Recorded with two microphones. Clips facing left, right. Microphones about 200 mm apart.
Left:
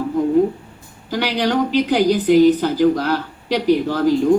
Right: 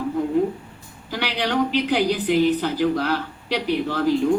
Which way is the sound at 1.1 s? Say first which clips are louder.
Left 5 dB; 40° left (ahead or behind).